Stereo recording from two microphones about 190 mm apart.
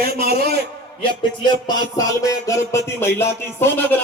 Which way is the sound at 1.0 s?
25° left (ahead or behind).